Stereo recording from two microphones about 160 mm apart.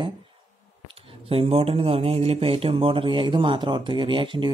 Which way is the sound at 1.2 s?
35° right (ahead or behind).